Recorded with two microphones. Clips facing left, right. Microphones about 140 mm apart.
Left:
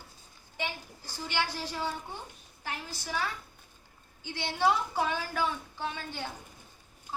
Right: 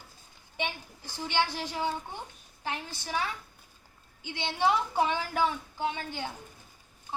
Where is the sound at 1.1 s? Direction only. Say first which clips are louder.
Right 3 dB; 20° right (ahead or behind).